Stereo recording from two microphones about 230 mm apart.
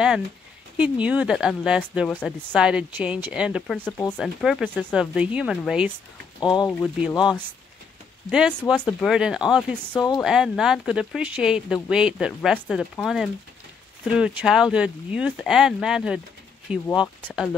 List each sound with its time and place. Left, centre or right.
0.7 s speech: centre
6.4 s speech: centre
6.7 s speech: centre